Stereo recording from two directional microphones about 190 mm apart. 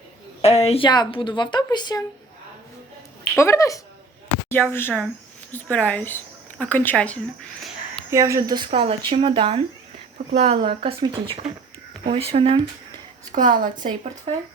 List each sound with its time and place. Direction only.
0.4 s a woman's voice: 35° left (ahead or behind)
3.3 s speech: 15° left (ahead or behind)
8.1 s speech: 15° right (ahead or behind)
13.3 s a woman's voice: 45° right (ahead or behind)
13.7 s speech: 25° right (ahead or behind)